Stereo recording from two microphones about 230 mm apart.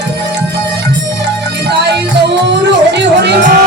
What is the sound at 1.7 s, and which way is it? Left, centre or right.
Music, right.